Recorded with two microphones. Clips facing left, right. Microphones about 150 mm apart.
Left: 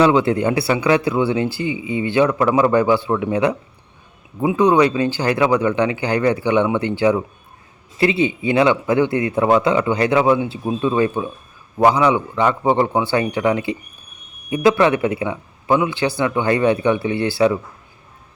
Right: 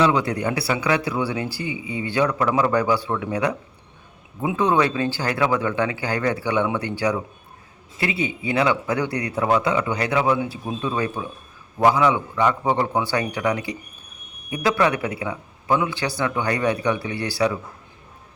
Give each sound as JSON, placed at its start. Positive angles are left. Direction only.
{"t": 0.0, "sound": "speech", "side_deg": 25}
{"t": 4.5, "sound": "speech", "side_deg": 15}